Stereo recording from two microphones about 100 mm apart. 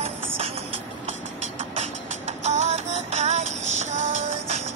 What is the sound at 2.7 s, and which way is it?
Music, 90° right.